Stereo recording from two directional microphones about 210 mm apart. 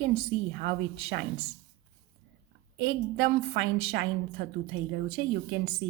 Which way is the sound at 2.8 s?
50° right (ahead or behind).